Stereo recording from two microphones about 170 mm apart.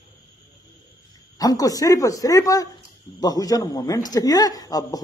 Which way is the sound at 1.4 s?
20° left (ahead or behind).